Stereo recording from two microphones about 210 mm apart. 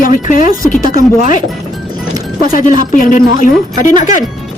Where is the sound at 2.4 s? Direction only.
40° left (ahead or behind).